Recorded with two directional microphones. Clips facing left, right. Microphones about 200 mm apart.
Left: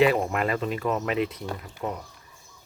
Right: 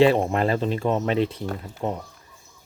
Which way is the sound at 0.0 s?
25° right (ahead or behind).